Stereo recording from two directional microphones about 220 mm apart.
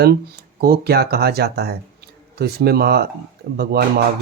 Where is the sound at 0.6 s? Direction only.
45° right (ahead or behind).